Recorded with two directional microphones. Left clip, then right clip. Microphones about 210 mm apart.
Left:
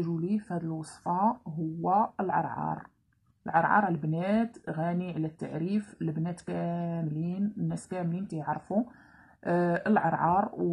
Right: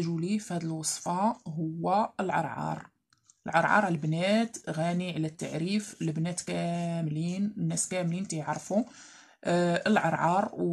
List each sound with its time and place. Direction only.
0.3 s speech: 25° right (ahead or behind)